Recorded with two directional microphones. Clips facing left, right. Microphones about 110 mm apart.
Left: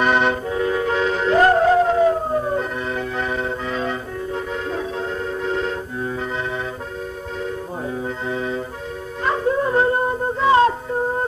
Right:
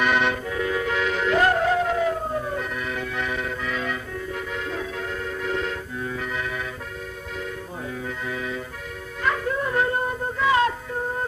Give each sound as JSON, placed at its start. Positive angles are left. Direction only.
{"t": 0.0, "sound": "music", "side_deg": 35}
{"t": 8.3, "sound": "accordion", "side_deg": 30}
{"t": 9.2, "sound": "music", "side_deg": 30}